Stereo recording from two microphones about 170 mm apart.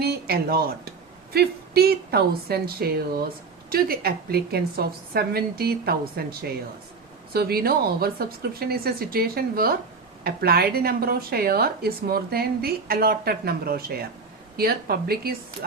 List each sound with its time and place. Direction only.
0.0 s speech: 65° right (ahead or behind)